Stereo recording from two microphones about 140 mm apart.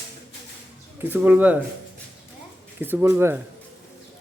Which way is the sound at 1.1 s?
10° right (ahead or behind).